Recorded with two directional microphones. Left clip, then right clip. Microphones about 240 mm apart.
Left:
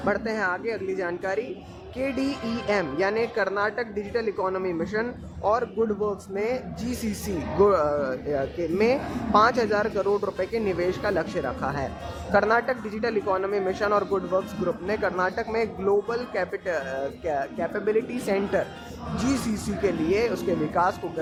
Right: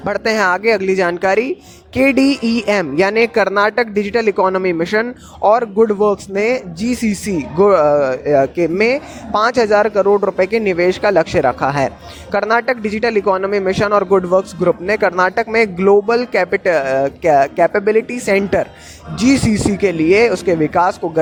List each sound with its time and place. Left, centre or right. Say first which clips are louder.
0.0 s speech: right 10 dB; right